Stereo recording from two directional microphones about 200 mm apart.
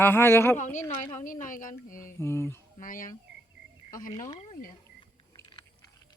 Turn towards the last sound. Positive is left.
turn(degrees=25)  # may be behind; listen again after turning